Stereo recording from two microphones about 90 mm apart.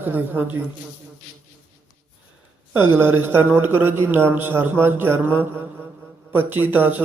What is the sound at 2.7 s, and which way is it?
A man's voice, 25° right (ahead or behind).